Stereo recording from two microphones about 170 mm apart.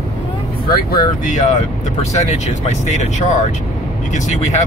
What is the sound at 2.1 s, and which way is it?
Speech, 40° left (ahead or behind).